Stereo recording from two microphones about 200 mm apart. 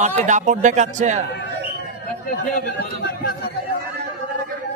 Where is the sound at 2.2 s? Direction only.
45° left (ahead or behind).